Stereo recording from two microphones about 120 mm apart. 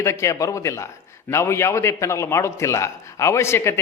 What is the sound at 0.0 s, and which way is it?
A man's voice, 25° left (ahead or behind).